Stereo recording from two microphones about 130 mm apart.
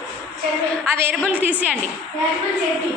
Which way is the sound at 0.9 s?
15° right (ahead or behind).